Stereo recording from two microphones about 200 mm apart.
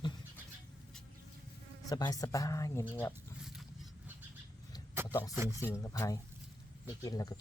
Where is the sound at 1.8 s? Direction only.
20° left (ahead or behind).